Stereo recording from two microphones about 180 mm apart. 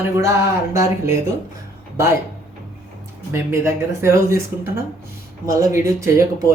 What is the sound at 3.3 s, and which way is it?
Speech, 15° right (ahead or behind).